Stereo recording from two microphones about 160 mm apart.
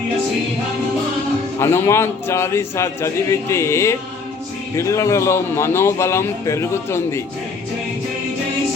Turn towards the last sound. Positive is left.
turn(degrees=15)  # may be behind; listen again after turning